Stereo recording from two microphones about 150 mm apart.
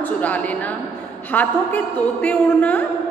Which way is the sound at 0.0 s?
10° left (ahead or behind).